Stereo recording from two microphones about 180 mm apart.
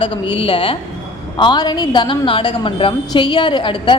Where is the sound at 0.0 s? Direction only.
30° left (ahead or behind).